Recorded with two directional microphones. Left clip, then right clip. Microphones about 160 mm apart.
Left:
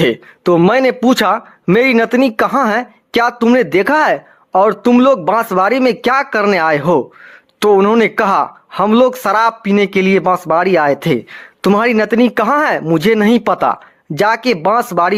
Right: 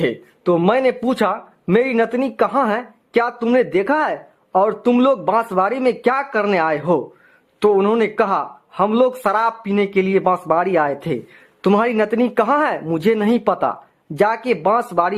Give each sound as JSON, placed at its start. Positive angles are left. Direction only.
{"t": 0.0, "sound": "speech", "side_deg": 35}